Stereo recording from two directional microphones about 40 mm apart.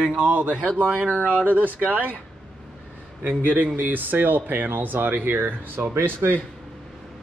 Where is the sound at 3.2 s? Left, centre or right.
Right.